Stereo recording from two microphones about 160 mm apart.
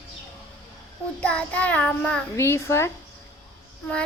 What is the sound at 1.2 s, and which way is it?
Child singing, 10° left (ahead or behind).